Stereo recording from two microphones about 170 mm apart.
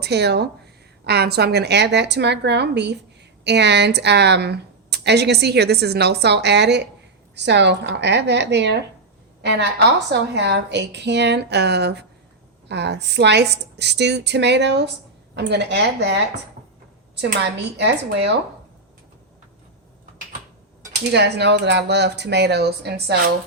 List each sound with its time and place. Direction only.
0.0 s a woman's voice: 75° right (ahead or behind)
17.4 s speech: 90° right
21.1 s speech: 85° right; by 23.3 s 65° right (ahead or behind)